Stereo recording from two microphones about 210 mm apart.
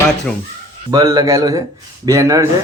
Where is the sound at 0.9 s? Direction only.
20° right (ahead or behind).